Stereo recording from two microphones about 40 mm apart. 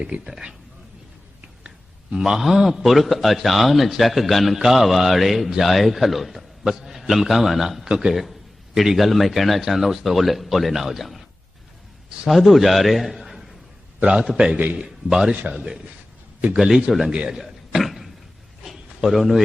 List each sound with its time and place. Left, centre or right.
0.1 s speech: right
2.1 s speech: centre
2.4 s a man's voice: centre
7.9 s a man's voice: centre
8.1 s a man's voice: centre
12.3 s a man's voice: centre
14.0 s a man's voice: right
14.8 s a man's voice: centre
16.6 s speech: centre
17.2 s cough: centre
18.6 s a sound: centre